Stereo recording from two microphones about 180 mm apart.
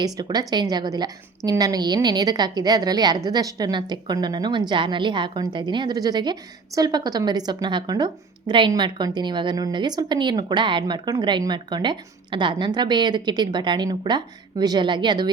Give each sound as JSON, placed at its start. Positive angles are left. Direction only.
{"t": 0.0, "sound": "a woman's voice", "side_deg": -20}